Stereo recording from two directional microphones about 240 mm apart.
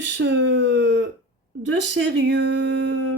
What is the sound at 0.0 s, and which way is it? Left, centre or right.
Speech, right.